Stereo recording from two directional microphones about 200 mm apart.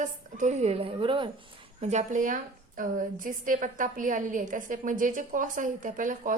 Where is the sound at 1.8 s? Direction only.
35° right (ahead or behind).